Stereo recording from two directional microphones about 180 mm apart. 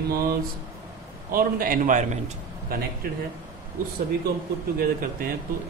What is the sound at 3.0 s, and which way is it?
Speech, 55° right (ahead or behind).